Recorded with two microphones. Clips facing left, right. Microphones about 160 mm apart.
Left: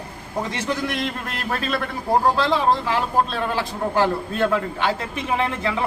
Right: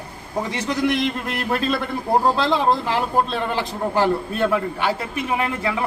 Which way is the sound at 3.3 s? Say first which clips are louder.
Right 1 dB; 15° right (ahead or behind).